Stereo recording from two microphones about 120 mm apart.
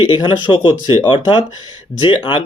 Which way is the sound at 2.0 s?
40° left (ahead or behind).